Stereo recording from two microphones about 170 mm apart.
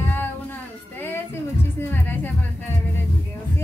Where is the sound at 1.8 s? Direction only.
10° left (ahead or behind).